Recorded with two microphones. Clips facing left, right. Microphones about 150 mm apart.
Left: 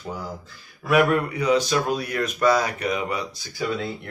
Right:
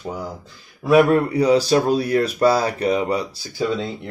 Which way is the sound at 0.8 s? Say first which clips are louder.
Right 5 dB; 30° right (ahead or behind).